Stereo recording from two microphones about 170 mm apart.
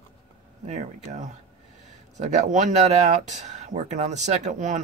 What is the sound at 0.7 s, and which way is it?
Speech, 40° right (ahead or behind).